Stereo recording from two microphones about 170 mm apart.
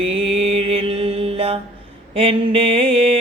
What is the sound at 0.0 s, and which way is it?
Mantra, 35° right (ahead or behind).